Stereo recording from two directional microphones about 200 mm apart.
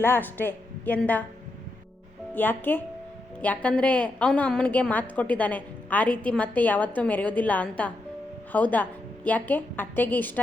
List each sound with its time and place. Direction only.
0.0 s a woman's voice: 10° left (ahead or behind)
2.3 s a woman's voice: 10° left (ahead or behind)